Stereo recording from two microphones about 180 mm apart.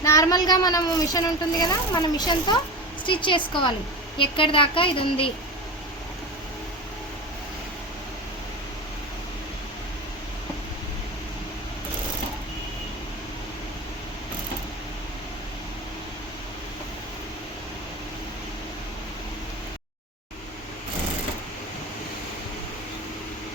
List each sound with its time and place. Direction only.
0.0 s a woman's voice: 20° left (ahead or behind)